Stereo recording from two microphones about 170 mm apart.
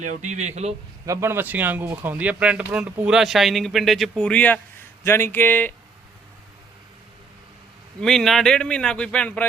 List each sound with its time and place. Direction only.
0.0 s speech: 45° right (ahead or behind)
1.0 s speech: 15° right (ahead or behind); by 5.7 s 10° left (ahead or behind)
8.0 s speech: centre (ahead or behind)